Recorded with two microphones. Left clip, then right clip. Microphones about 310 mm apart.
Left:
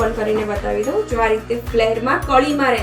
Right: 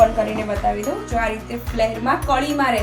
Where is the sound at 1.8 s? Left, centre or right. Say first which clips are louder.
Left 3 dB; right.